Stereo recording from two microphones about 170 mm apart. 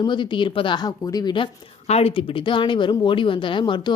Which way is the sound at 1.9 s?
35° left (ahead or behind).